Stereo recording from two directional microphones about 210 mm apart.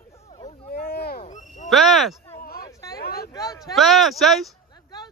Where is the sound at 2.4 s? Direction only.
45° left (ahead or behind).